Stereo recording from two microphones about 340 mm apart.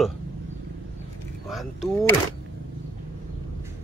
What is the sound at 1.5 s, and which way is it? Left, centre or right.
Speech, centre.